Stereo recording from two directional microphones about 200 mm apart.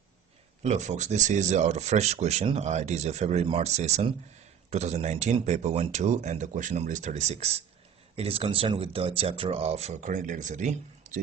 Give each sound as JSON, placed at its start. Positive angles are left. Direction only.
{"t": 0.6, "sound": "speech", "side_deg": -35}